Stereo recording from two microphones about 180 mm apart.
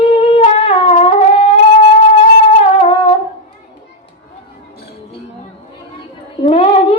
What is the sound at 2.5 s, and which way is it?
Wind instrument, 30° left (ahead or behind).